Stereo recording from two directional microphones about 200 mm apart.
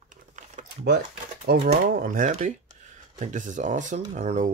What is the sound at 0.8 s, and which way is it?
Speech, 50° right (ahead or behind).